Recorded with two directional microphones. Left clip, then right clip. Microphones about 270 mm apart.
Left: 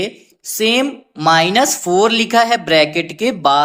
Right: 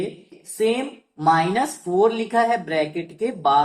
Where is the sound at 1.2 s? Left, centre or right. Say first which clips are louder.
Left 6 dB; left.